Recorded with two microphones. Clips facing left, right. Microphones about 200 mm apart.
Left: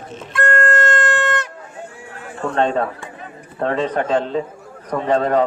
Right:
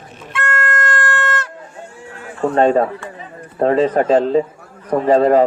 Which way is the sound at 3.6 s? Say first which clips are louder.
Right 6 dB; 35° right (ahead or behind).